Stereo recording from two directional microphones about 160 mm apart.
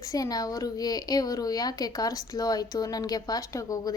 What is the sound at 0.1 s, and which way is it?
A child's voice, 20° left (ahead or behind).